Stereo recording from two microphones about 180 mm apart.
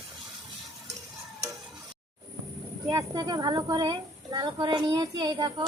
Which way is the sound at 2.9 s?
20° right (ahead or behind).